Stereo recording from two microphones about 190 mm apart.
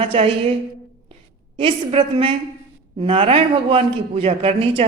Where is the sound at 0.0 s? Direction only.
30° right (ahead or behind).